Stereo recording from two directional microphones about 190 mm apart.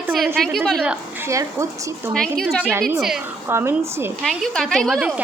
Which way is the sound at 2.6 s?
10° right (ahead or behind).